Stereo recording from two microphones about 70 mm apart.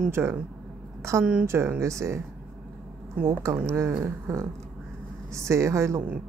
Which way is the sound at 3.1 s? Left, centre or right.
Right.